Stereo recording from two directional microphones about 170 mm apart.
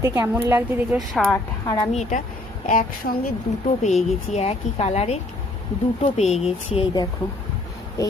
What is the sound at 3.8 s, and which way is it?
A woman's voice, 40° left (ahead or behind).